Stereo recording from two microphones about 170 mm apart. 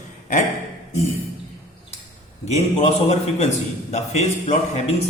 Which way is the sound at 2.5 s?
35° left (ahead or behind).